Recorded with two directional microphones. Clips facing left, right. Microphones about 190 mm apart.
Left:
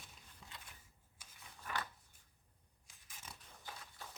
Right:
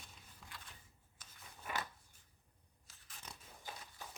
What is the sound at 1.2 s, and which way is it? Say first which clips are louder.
Scissors: right 1 dB; 10° left (ahead or behind).